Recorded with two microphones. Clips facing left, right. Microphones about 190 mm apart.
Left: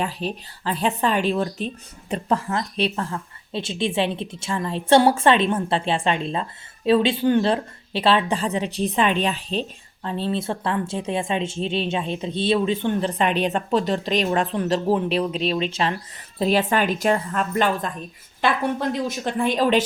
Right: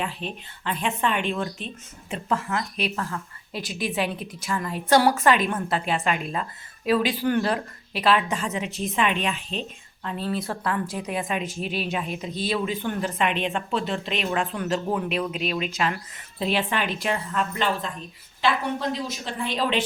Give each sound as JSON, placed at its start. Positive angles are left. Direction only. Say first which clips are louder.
{"t": 0.0, "sound": "speech", "louder": "left 5 dB", "side_deg": 40}
{"t": 16.4, "sound": "a woman's voice", "louder": "left 5 dB", "side_deg": 40}